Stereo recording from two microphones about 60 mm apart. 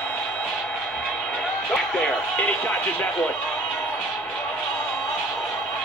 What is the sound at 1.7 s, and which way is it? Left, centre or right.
Speech, centre.